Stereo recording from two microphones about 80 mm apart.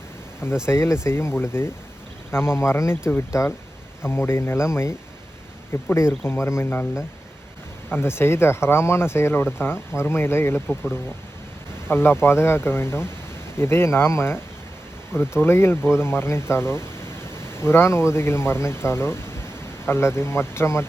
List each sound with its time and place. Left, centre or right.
0.6 s speech: left
7.9 s speech: left
11.9 s speech: left